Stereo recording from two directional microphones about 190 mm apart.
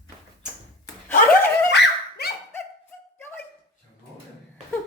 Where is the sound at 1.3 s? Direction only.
55° left (ahead or behind).